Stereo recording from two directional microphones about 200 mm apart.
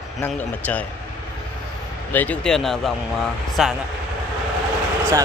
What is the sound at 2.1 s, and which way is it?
Speech, 10° left (ahead or behind).